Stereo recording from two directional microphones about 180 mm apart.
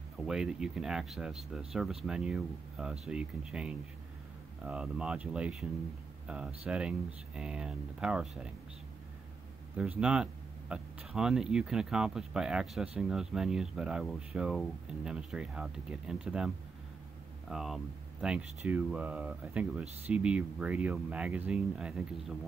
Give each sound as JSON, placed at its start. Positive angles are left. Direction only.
{"t": 0.3, "sound": "speech", "side_deg": -5}
{"t": 9.8, "sound": "speech", "side_deg": -5}